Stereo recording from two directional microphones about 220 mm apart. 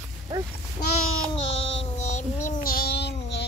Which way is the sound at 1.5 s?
25° left (ahead or behind).